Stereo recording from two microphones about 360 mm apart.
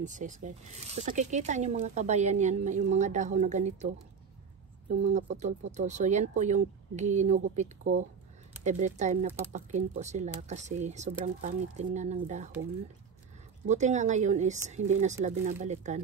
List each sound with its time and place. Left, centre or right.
0.0 s speech: right
5.0 s speech: centre
13.7 s speech: centre